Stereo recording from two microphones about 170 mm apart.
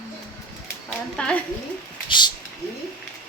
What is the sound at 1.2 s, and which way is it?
Speech, 5° left (ahead or behind).